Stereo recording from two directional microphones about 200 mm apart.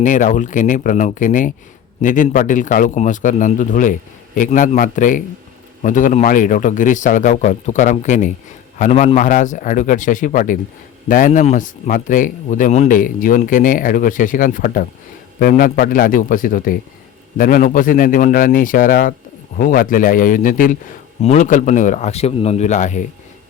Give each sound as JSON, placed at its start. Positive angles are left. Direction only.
{"t": 0.0, "sound": "a man's voice", "side_deg": 40}